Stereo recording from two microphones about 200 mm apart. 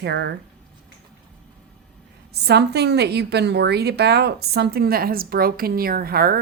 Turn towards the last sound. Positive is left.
turn(degrees=-50)  # may be behind; listen again after turning